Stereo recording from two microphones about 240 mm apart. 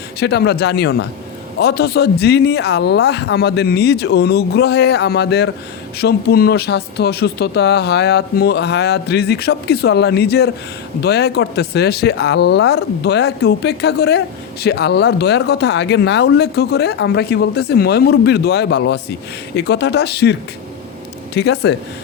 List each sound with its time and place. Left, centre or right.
0.2 s speech: left
21.3 s speech: left